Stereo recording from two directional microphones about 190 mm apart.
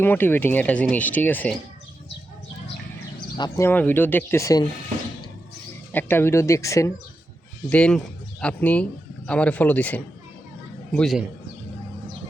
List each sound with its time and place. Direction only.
0.0 s speech: 10° left (ahead or behind)
3.3 s speech: 20° left (ahead or behind)
3.7 s speech: 10° left (ahead or behind)
5.9 s speech: 10° left (ahead or behind)
7.7 s a man's voice: 5° left (ahead or behind)